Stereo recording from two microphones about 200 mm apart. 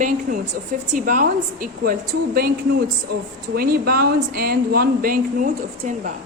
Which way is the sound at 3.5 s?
50° right (ahead or behind).